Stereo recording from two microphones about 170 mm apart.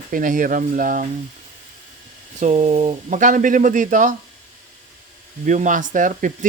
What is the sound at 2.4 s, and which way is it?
Speech, 40° right (ahead or behind).